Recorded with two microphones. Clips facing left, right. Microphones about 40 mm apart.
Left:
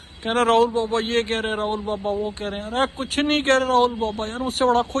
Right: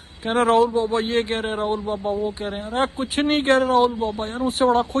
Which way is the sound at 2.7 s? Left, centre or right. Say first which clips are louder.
Even; left.